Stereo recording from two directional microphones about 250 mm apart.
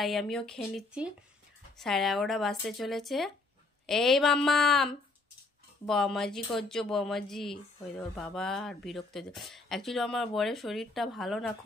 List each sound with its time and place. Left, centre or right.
0.0 s speech: centre